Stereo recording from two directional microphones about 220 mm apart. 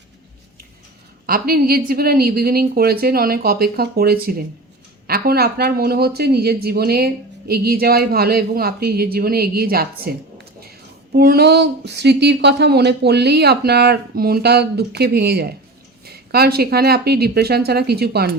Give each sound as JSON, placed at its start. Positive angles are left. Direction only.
{"t": 1.3, "sound": "speech", "side_deg": -45}